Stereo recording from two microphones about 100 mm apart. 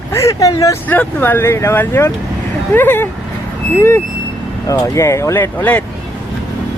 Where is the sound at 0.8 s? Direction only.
15° left (ahead or behind).